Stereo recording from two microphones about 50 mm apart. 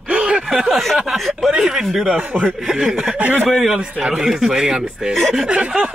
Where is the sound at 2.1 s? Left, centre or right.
Centre.